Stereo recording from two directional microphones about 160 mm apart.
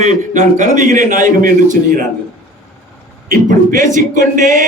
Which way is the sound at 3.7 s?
55° right (ahead or behind).